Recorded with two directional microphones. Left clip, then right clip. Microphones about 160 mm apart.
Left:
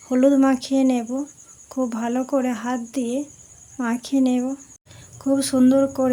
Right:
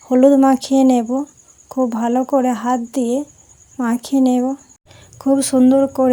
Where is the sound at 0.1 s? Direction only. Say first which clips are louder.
Right 6 dB; 25° right (ahead or behind).